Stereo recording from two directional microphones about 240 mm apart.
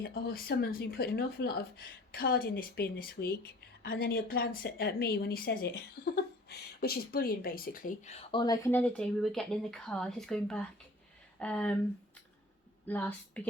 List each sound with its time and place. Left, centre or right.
0.0 s speech: left; by 11.8 s centre
12.9 s speech: centre